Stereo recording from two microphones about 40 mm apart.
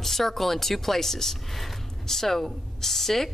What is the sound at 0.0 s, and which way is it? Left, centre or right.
Speech, centre.